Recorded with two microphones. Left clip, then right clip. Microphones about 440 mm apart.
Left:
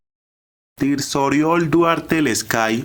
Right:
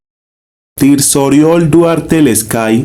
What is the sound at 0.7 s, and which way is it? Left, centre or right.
Speech, left.